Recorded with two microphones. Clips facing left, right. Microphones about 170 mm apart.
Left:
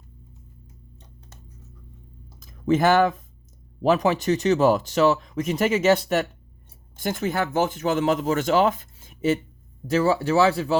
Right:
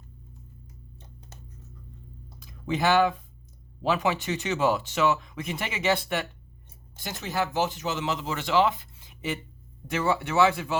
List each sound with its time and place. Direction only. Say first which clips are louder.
2.4 s speech: left 7 dB; 45° left (ahead or behind)
7.0 s speech: left 5 dB; 50° left (ahead or behind); by 10.8 s 35° left (ahead or behind)